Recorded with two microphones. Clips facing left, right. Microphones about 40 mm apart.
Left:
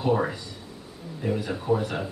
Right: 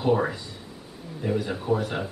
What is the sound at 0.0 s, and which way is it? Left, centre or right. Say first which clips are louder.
Speech: right 1 dB; centre.